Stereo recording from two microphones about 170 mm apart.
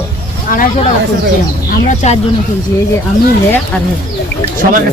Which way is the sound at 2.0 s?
40° left (ahead or behind).